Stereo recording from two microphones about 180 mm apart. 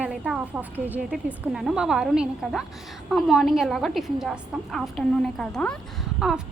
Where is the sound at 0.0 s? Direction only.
5° right (ahead or behind).